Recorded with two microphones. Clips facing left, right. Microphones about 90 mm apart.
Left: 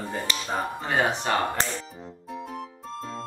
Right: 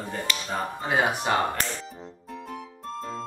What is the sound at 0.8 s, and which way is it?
Speech, 10° right (ahead or behind).